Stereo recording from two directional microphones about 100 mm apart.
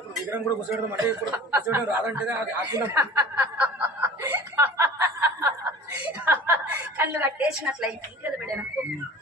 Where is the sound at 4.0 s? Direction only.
25° right (ahead or behind).